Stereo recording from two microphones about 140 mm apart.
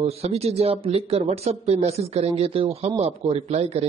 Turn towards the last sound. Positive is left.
turn(degrees=-50)  # may be behind; listen again after turning